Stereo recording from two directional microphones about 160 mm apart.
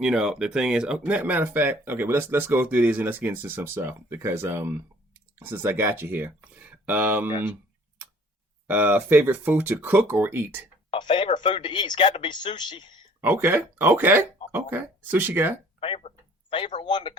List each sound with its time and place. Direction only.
0.0 s speech: 5° right (ahead or behind)
8.6 s speech: 10° right (ahead or behind)
10.9 s speech: 30° left (ahead or behind)
13.2 s speech: 15° right (ahead or behind)
15.8 s a sound: 35° left (ahead or behind)
16.8 s speech: 30° left (ahead or behind)